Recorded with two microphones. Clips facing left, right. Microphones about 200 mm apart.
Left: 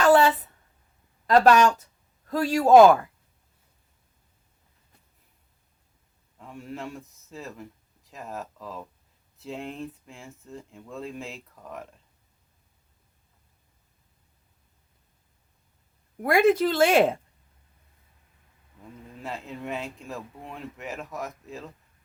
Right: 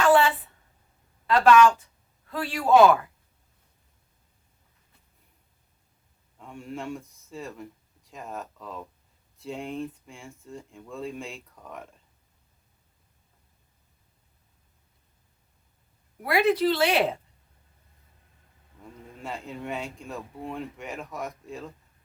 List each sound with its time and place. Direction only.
0.0 s a sound: 40° left (ahead or behind)
1.3 s speech: 40° left (ahead or behind)
6.4 s speech: centre (ahead or behind)
16.2 s speech: 45° left (ahead or behind)
19.2 s speech: centre (ahead or behind)